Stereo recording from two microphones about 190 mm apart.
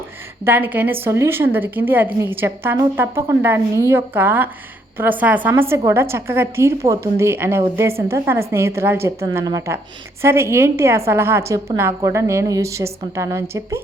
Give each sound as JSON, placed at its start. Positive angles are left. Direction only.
{"t": 0.4, "sound": "a woman's voice", "side_deg": -10}